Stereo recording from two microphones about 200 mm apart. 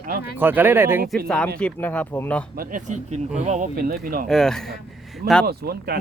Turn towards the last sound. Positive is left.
turn(degrees=-50)  # may be behind; listen again after turning